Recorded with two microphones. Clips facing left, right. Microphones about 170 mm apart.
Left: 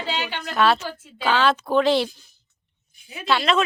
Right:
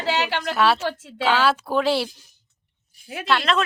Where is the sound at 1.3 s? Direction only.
5° right (ahead or behind).